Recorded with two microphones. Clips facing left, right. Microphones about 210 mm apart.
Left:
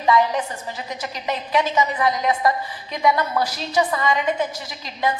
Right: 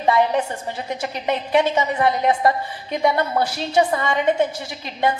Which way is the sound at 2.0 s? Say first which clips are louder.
Right 2 dB; 55° right (ahead or behind).